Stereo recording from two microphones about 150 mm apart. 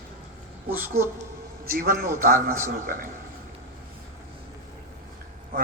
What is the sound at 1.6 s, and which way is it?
Speech, 70° right (ahead or behind).